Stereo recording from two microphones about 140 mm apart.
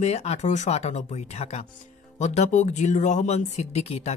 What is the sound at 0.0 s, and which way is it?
Speech, 50° left (ahead or behind).